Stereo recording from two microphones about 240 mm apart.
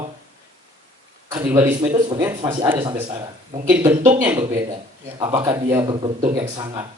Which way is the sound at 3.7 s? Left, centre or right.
Centre.